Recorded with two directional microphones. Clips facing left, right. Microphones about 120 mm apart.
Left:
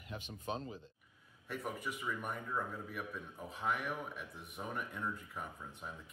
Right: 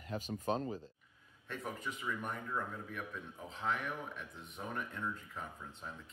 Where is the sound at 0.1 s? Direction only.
40° right (ahead or behind).